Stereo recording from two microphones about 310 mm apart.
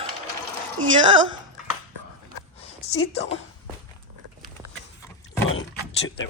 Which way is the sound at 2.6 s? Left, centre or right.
Centre.